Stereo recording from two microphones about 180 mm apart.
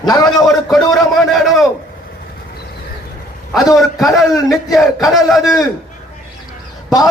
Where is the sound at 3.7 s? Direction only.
Centre (ahead or behind).